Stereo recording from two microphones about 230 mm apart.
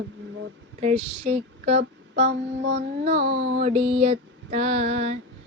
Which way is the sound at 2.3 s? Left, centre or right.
Right.